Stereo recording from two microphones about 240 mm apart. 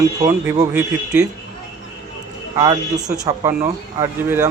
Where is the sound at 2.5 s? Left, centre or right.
Centre.